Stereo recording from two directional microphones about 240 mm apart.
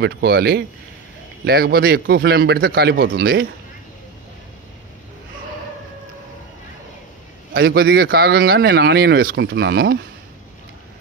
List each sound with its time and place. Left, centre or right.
0.0 s speech: right
7.5 s speech: right